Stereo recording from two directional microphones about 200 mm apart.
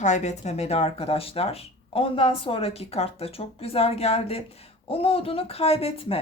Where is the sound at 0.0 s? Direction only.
35° left (ahead or behind).